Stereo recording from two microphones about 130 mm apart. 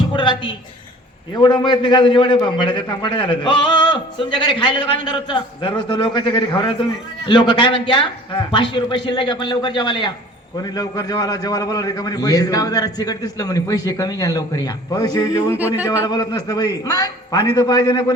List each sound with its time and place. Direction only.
0.1 s a sound: 35° left (ahead or behind)
1.3 s a man's voice: 35° left (ahead or behind)
15.5 s speech: 15° right (ahead or behind)
16.0 s a man's voice: 30° left (ahead or behind)